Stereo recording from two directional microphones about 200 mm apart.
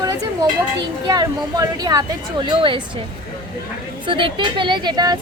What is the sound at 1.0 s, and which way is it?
A woman's voice, 20° right (ahead or behind).